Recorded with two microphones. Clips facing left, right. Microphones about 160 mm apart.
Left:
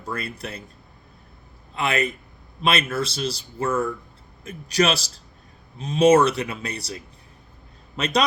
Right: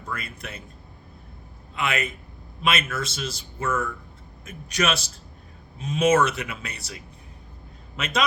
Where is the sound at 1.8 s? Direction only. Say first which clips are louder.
Left 3 dB; 35° left (ahead or behind).